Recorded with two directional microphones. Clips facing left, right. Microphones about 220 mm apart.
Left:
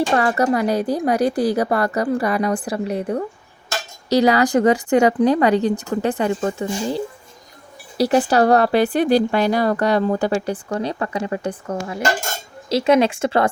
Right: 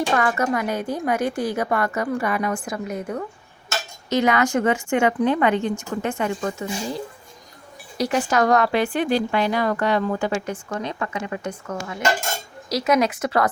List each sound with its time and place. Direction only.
0.1 s speech: 35° left (ahead or behind)